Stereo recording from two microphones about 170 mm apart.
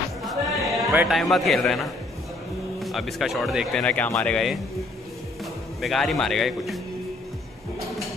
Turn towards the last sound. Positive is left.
turn(degrees=0)  # may be behind; listen again after turning